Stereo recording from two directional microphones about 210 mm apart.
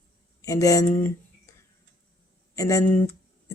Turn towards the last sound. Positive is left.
turn(degrees=15)  # may be behind; listen again after turning